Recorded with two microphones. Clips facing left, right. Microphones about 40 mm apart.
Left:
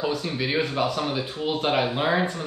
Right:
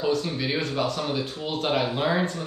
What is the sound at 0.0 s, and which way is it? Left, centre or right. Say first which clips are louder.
Speech: right 1 dB; centre.